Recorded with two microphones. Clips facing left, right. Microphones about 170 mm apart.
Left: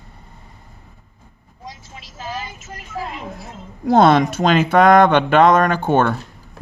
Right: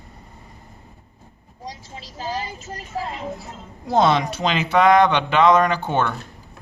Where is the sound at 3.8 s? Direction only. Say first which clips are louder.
Left 5 dB; 55° left (ahead or behind).